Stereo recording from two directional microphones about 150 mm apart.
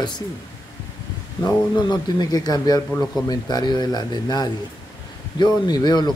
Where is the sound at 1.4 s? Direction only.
25° left (ahead or behind).